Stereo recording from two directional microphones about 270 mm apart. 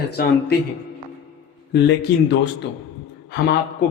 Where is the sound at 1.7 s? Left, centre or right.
Left.